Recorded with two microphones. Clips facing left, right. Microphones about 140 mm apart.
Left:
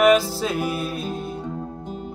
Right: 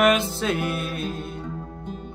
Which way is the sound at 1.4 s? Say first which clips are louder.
Left 4 dB; 25° left (ahead or behind).